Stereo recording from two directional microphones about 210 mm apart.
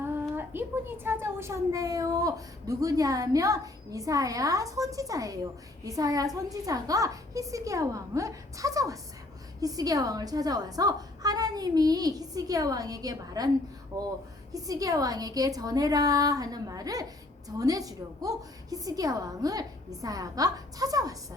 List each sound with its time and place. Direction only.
0.3 s a woman's voice: 10° right (ahead or behind)